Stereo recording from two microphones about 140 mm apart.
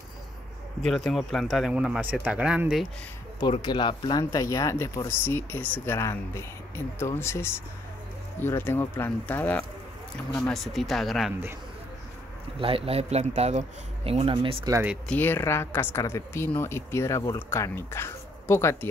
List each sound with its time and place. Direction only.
0.8 s speech: centre (ahead or behind)
3.3 s speech: 30° left (ahead or behind); by 11.3 s centre (ahead or behind)
12.5 s speech: 40° right (ahead or behind)
14.7 s speech: 15° right (ahead or behind)
15.0 s speech: 15° left (ahead or behind)